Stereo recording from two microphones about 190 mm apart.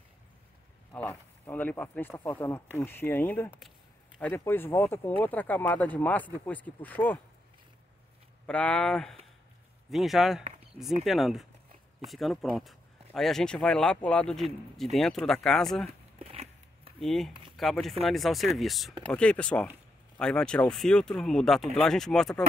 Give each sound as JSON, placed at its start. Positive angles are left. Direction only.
{"t": 0.9, "sound": "speech", "side_deg": 10}
{"t": 8.5, "sound": "speech", "side_deg": 5}
{"t": 15.9, "sound": "a sound", "side_deg": -35}
{"t": 17.0, "sound": "speech", "side_deg": 0}